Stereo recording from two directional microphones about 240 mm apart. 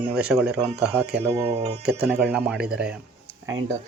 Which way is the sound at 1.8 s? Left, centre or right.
Centre.